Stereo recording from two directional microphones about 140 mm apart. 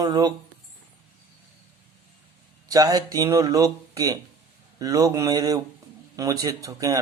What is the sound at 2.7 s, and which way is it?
Speech, 25° right (ahead or behind).